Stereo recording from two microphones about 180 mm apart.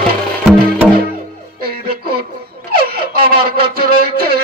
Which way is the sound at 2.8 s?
55° right (ahead or behind).